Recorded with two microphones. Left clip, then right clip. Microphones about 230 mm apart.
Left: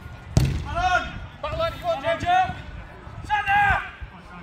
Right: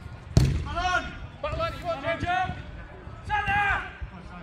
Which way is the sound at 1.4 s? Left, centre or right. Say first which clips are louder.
Left 4 dB; left.